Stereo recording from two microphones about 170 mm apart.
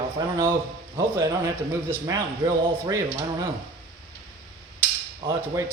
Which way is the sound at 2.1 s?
20° right (ahead or behind).